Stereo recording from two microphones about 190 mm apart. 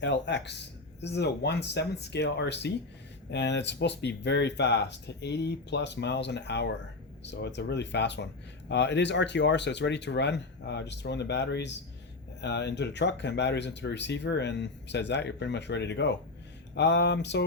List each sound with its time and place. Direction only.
0.0 s speech: 65° left (ahead or behind)